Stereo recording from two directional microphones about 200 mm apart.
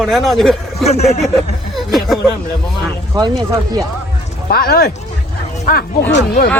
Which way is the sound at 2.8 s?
20° right (ahead or behind).